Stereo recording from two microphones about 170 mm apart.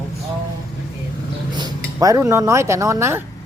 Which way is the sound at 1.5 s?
25° right (ahead or behind).